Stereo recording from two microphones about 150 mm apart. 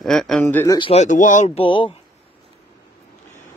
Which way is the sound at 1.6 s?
35° left (ahead or behind).